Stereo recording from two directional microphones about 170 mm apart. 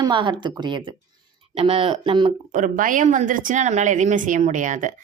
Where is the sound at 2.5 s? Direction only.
50° right (ahead or behind).